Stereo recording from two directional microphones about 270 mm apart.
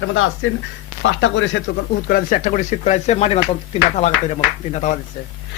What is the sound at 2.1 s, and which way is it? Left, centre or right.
Speech, left.